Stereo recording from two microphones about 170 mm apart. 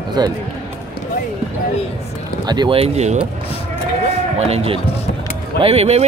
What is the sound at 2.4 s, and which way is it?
Speech, 25° right (ahead or behind).